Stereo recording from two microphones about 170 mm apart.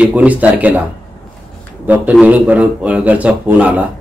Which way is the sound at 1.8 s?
10° right (ahead or behind).